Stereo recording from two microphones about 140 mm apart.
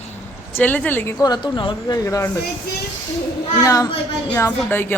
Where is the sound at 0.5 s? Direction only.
10° left (ahead or behind).